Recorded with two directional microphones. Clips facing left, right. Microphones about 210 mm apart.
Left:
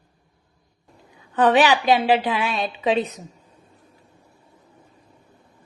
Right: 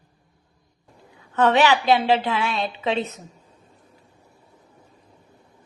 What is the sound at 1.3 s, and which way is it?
A woman's voice, 15° left (ahead or behind).